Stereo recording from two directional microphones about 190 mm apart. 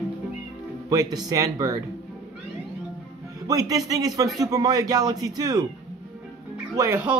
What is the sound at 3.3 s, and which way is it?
Speech, 20° right (ahead or behind).